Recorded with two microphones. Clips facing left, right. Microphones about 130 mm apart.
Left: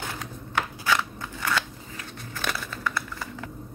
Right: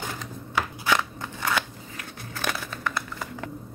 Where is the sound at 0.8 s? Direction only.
15° right (ahead or behind).